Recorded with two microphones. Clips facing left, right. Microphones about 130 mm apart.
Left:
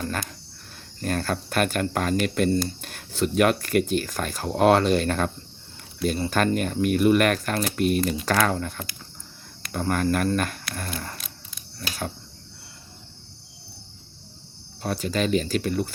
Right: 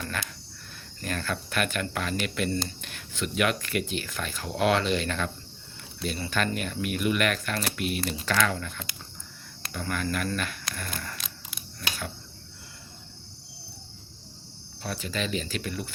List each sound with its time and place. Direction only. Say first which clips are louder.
0.0 s cricket: left 5 dB; 40° left (ahead or behind)
1.0 s speech: left 6 dB; 40° left (ahead or behind)
14.8 s speech: left 7 dB; 45° left (ahead or behind)